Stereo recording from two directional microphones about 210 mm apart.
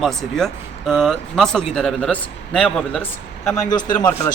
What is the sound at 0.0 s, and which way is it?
A man's voice, centre (ahead or behind).